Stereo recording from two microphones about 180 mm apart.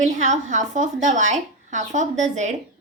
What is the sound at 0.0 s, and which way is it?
A woman's voice, 40° right (ahead or behind).